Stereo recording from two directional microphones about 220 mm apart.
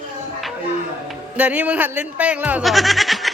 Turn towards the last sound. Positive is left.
turn(degrees=0)  # may be behind; listen again after turning